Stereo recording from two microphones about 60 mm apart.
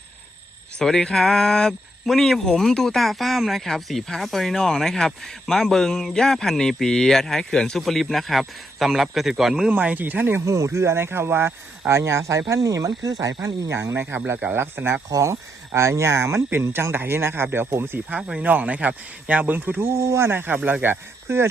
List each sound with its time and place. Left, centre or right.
0.8 s speech: centre
9.7 s speech: right
10.4 s speech: right
15.1 s speech: right
16.9 s speech: right
18.3 s speech: right
19.9 s speech: right